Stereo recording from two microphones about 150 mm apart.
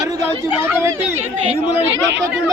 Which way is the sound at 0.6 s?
15° right (ahead or behind).